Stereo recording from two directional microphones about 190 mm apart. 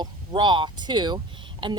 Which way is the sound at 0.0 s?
25° right (ahead or behind).